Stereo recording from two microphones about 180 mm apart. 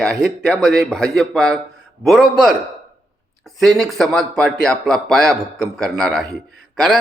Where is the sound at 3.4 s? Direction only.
Centre (ahead or behind).